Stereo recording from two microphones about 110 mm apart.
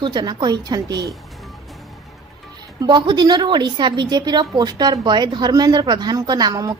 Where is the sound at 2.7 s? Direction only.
40° right (ahead or behind).